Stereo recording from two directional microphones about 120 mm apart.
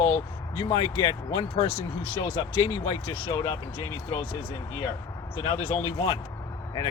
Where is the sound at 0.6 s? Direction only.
40° left (ahead or behind).